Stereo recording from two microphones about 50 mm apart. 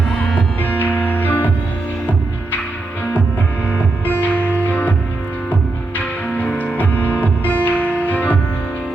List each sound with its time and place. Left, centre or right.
0.6 s music: left
4.0 s music: left
6.6 s music: left